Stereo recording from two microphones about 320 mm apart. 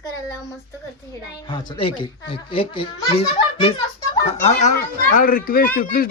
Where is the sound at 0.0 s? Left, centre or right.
Centre.